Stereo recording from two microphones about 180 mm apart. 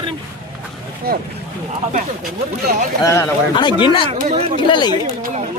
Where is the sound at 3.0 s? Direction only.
20° left (ahead or behind).